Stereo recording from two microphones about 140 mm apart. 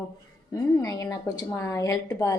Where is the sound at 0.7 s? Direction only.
25° left (ahead or behind).